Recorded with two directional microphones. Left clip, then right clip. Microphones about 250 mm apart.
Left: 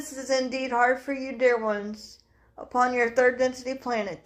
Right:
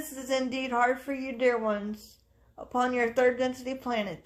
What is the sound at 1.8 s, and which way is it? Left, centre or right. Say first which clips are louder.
Speech: left 2 dB; right.